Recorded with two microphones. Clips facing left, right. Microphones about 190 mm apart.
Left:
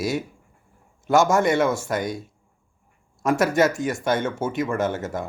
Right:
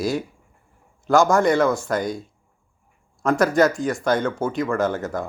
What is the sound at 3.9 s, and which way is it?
Speech, 25° left (ahead or behind).